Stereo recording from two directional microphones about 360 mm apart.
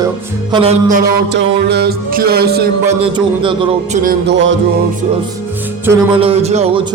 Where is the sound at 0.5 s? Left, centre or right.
Centre.